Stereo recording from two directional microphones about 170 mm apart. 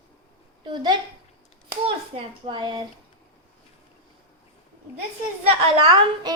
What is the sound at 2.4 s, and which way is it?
Speech, 25° right (ahead or behind).